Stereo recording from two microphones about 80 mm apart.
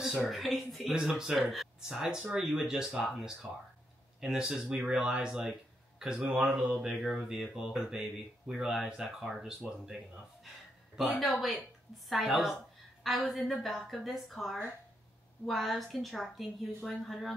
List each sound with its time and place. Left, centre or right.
0.0 s speech: centre